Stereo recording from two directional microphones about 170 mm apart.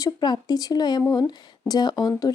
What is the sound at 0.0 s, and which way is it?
Speech, 25° left (ahead or behind).